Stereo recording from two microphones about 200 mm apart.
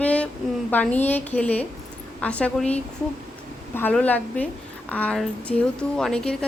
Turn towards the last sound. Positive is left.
turn(degrees=5)  # may be behind; listen again after turning